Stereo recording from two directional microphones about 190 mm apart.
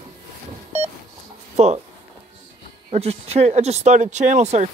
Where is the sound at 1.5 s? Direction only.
35° right (ahead or behind).